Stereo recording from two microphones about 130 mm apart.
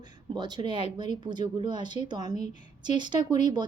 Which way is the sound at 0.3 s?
35° right (ahead or behind).